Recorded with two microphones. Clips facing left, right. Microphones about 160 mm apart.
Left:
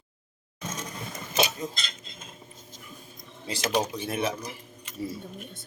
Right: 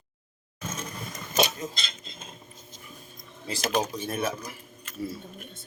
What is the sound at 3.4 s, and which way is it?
Speech, 10° left (ahead or behind).